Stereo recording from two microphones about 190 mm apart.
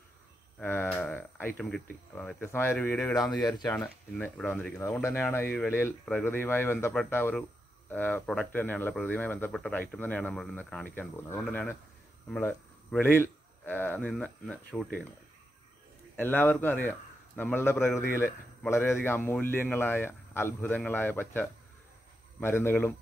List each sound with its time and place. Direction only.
0.6 s speech: 10° left (ahead or behind)
3.4 s speech: 20° left (ahead or behind)
3.7 s a man's voice: 5° left (ahead or behind)
16.2 s speech: 10° left (ahead or behind)